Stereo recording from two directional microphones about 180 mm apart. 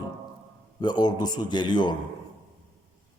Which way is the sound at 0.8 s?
25° left (ahead or behind).